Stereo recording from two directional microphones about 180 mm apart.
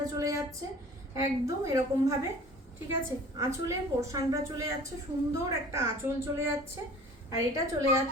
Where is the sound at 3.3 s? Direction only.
15° right (ahead or behind).